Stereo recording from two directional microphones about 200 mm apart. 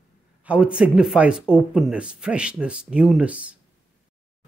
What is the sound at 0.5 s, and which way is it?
Speech, 5° right (ahead or behind).